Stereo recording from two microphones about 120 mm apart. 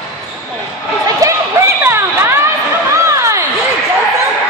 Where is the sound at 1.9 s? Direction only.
20° right (ahead or behind).